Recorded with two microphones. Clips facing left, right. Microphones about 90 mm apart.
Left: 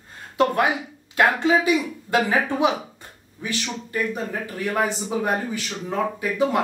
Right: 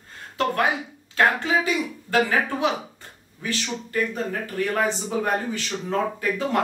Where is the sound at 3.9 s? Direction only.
15° left (ahead or behind).